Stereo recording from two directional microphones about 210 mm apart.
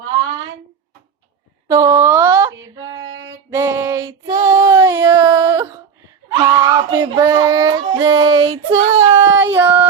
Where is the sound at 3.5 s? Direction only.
15° right (ahead or behind).